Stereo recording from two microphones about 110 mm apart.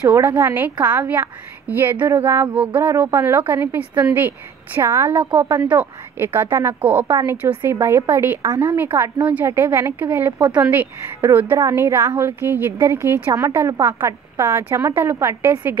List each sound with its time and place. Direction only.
0.1 s a woman's voice: 20° right (ahead or behind)